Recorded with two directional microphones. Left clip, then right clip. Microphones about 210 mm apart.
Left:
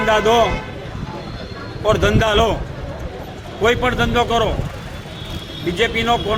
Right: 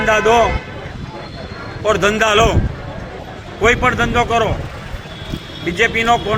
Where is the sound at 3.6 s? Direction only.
5° left (ahead or behind).